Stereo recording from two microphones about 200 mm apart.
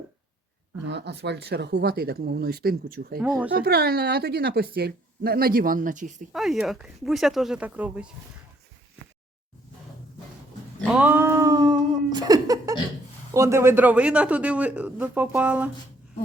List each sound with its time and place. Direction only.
0.9 s a woman's voice: 60° right (ahead or behind)
3.2 s speech: centre (ahead or behind)
3.6 s a woman's voice: 50° right (ahead or behind)
6.3 s speech: centre (ahead or behind)
10.8 s a sound: 10° right (ahead or behind)
13.3 s a man's voice: 15° right (ahead or behind)